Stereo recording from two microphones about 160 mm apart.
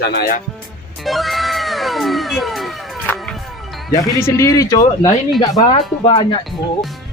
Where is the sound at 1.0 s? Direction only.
Centre (ahead or behind).